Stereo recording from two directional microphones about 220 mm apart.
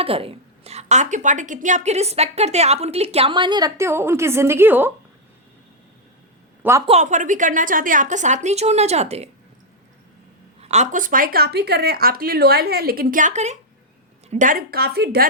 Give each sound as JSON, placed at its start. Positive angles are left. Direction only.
{"t": 0.0, "sound": "a woman's voice", "side_deg": -25}
{"t": 6.6, "sound": "speech", "side_deg": -10}
{"t": 6.8, "sound": "a woman's voice", "side_deg": -30}
{"t": 10.6, "sound": "speech", "side_deg": -30}